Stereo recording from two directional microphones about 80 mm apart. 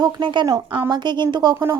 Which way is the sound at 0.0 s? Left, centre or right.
Right.